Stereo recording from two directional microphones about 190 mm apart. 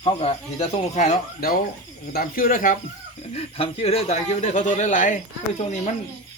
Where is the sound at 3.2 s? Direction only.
30° left (ahead or behind).